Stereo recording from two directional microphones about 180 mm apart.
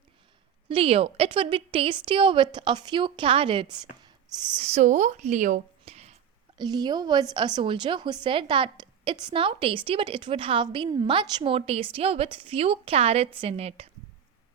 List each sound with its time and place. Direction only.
0.7 s speech: 30° right (ahead or behind)
4.6 s speech: 40° right (ahead or behind)
6.6 s speech: 25° right (ahead or behind)